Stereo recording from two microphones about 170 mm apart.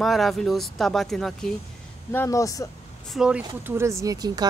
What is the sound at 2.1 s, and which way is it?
Speech, 15° left (ahead or behind).